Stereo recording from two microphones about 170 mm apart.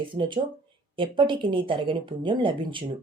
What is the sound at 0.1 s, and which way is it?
Speech, 30° right (ahead or behind).